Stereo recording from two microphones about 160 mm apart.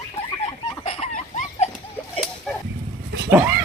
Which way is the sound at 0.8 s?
35° left (ahead or behind).